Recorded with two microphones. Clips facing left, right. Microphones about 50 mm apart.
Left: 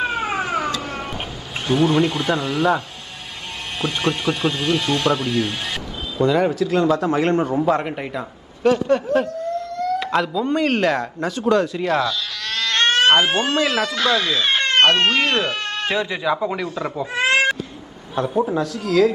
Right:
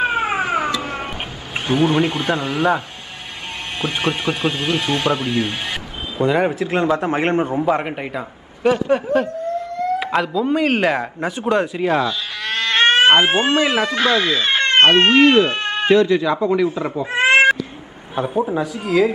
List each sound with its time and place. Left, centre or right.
0.0 s cat: centre
0.7 s cat: right
1.7 s speech: centre
3.8 s speech: centre
6.1 s a man's voice: right
13.7 s speech: centre
15.1 s speech: centre
15.4 s cat: right
15.9 s speech: centre
16.6 s speech: centre
17.1 s cat: right
18.1 s a man's voice: centre